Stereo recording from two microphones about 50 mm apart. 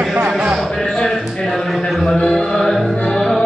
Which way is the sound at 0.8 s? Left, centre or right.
Centre.